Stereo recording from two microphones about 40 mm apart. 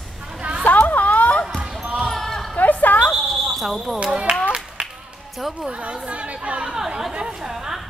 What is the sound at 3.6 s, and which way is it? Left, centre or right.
Speech, centre.